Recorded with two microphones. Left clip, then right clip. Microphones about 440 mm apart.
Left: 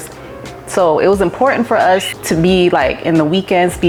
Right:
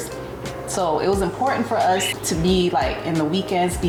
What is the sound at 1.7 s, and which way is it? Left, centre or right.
Speech, left.